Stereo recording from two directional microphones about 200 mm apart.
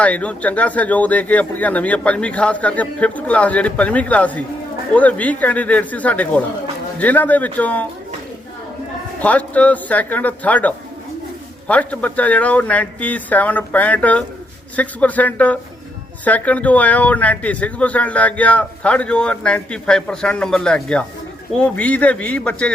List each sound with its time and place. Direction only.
0.0 s speech: 5° left (ahead or behind)
9.2 s speech: 5° left (ahead or behind)